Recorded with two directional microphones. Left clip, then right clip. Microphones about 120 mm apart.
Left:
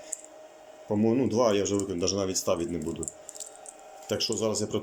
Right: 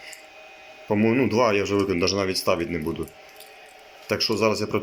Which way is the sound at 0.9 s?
15° left (ahead or behind).